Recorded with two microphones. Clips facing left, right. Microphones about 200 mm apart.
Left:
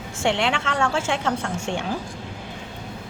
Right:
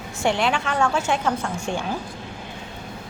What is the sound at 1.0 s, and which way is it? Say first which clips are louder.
Speech: right 2 dB; 90° left.